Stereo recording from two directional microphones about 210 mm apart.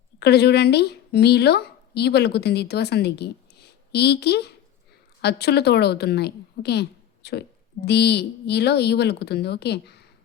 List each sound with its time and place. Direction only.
0.2 s a woman's voice: 50° left (ahead or behind)